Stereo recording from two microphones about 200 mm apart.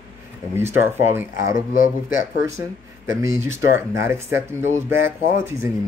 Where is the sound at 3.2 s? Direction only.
15° right (ahead or behind).